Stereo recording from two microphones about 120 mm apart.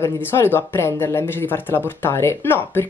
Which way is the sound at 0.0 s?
20° left (ahead or behind).